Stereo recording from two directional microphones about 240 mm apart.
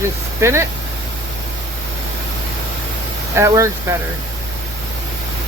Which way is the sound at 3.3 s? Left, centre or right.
Centre.